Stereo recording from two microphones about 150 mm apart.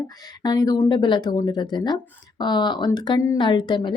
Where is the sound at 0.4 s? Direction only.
25° left (ahead or behind).